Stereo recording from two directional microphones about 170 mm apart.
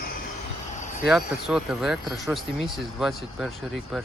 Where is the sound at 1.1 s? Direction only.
Centre (ahead or behind).